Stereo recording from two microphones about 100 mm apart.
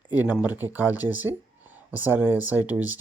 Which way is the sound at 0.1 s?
15° right (ahead or behind).